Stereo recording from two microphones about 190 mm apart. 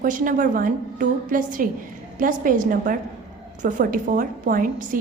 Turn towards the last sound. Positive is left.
turn(degrees=-45)  # may be behind; listen again after turning